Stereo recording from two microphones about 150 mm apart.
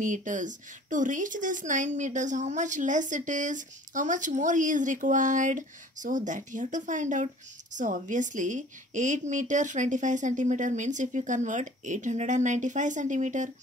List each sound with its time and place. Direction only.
0.0 s speech: 60° right (ahead or behind)